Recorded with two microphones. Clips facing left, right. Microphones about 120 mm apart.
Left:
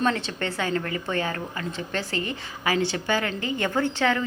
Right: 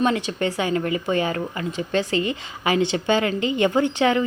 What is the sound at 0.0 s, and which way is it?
A woman's voice, 15° right (ahead or behind).